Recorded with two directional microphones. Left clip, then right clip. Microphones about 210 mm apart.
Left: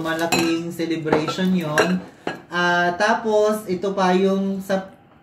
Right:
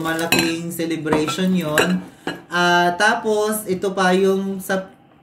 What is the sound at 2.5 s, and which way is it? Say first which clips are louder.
Speech: right 3 dB; 50° right (ahead or behind).